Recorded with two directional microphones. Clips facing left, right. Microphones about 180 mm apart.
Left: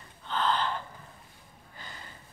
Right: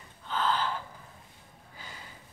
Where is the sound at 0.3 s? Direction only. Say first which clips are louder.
Left 1 dB; 5° right (ahead or behind).